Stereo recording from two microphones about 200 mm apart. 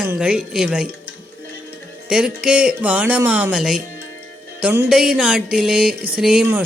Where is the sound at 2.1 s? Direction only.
5° right (ahead or behind).